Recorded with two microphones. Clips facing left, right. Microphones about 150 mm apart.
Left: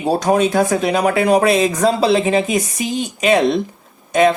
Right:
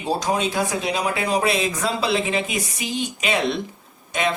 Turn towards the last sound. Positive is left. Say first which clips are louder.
# left 10 dB
turn(degrees=45)  # may be behind; listen again after turning